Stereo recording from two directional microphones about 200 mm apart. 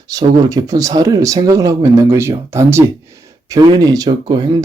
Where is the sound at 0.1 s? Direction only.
15° right (ahead or behind).